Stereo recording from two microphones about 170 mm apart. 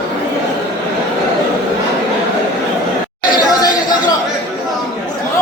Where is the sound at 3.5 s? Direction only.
25° left (ahead or behind).